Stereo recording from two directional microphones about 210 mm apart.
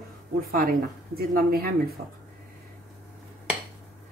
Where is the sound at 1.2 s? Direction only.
45° right (ahead or behind).